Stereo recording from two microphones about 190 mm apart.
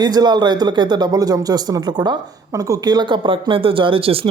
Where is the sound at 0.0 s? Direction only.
20° right (ahead or behind).